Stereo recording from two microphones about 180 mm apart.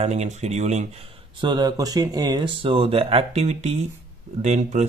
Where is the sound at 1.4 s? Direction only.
25° right (ahead or behind).